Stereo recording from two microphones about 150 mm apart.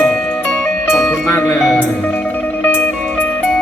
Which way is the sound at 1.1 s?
15° left (ahead or behind).